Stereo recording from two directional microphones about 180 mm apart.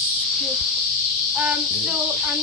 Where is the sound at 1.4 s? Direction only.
5° right (ahead or behind).